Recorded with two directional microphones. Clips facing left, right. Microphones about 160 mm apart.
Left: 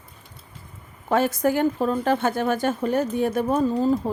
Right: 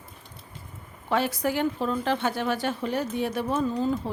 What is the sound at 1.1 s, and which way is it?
A woman's voice, 45° left (ahead or behind).